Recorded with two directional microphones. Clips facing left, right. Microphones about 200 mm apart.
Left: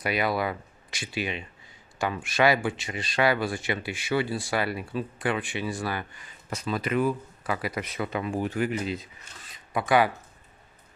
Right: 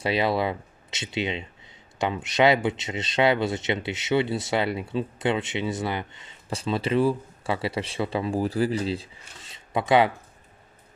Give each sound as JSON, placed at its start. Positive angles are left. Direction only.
{"t": 0.0, "sound": "speech", "side_deg": -25}